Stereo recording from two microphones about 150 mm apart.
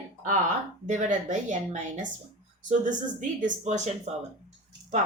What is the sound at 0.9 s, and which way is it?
A woman's voice, 55° right (ahead or behind).